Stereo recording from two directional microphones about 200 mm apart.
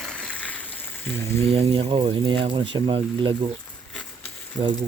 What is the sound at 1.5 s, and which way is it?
Speech, 25° right (ahead or behind).